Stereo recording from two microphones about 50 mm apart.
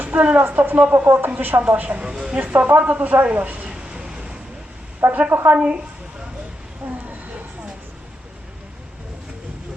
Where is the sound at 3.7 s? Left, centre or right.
Centre.